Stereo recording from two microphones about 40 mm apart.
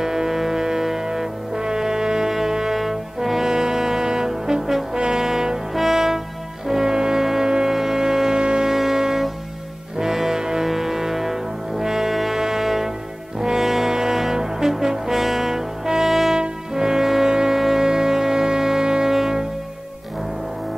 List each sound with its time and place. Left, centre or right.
0.0 s music: centre
5.0 s brass instrument: centre
5.8 s music: centre
8.6 s music: centre
13.4 s brass instrument: centre